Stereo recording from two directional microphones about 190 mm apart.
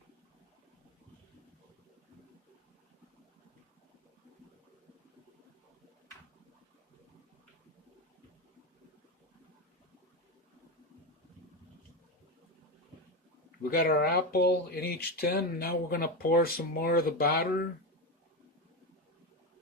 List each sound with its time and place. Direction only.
13.6 s speech: 50° left (ahead or behind)